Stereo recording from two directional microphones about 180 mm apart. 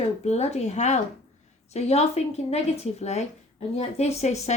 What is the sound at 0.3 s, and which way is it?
Speech, 35° left (ahead or behind).